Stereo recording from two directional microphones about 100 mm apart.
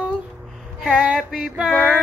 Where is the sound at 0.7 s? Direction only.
5° right (ahead or behind).